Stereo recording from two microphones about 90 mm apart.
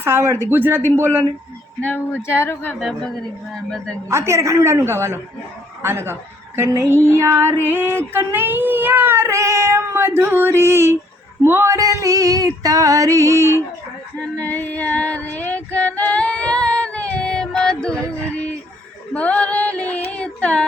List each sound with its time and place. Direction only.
0.0 s a sound: 30° right (ahead or behind)
1.8 s female singing: 20° left (ahead or behind)
2.2 s speech: 30° left (ahead or behind)
3.5 s female singing: 10° left (ahead or behind)
4.1 s female singing: 30° right (ahead or behind)
5.8 s a sound: 25° right (ahead or behind)
11.4 s female singing: 25° right (ahead or behind)
14.3 s child singing: 20° left (ahead or behind)
19.1 s female singing: 15° left (ahead or behind)